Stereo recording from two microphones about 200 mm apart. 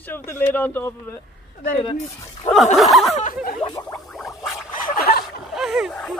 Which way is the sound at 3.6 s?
20° left (ahead or behind).